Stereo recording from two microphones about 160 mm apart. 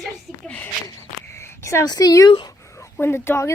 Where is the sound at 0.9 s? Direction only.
15° left (ahead or behind).